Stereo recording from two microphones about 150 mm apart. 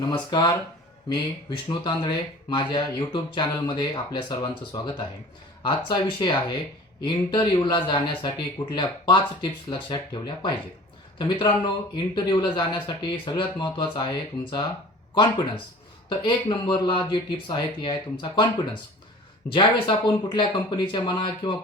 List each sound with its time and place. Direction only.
0.0 s a man's voice: 30° left (ahead or behind)
16.0 s speech: 30° left (ahead or behind)